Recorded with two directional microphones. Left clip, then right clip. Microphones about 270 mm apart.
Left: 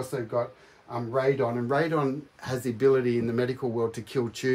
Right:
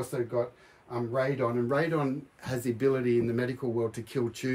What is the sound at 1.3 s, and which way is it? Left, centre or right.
Speech, centre.